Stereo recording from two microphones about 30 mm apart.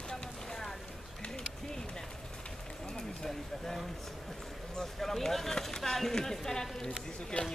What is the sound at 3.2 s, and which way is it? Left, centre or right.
Speech, centre.